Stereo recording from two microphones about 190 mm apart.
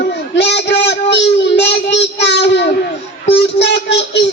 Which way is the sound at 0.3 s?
60° left (ahead or behind).